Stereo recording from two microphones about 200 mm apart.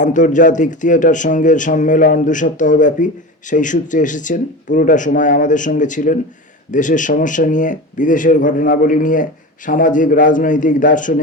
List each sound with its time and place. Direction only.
0.0 s speech: 40° left (ahead or behind)